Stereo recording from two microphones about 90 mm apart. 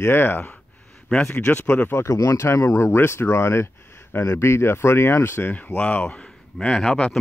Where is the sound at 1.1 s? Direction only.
10° left (ahead or behind).